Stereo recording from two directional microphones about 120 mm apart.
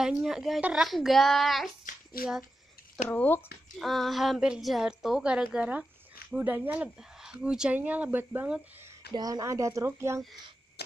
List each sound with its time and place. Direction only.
0.0 s a woman's voice: 5° right (ahead or behind)
3.1 s speech: 15° left (ahead or behind)
3.7 s a woman's voice: centre (ahead or behind)
9.1 s speech: 30° right (ahead or behind)